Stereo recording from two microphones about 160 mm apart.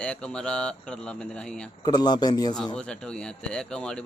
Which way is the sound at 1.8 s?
25° left (ahead or behind).